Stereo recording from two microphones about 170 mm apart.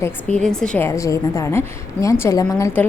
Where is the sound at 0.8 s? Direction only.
20° left (ahead or behind).